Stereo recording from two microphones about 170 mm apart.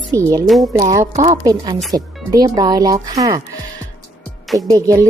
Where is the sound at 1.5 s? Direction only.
25° right (ahead or behind).